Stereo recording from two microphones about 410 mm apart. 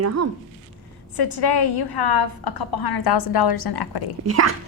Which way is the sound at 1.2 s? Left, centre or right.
Left.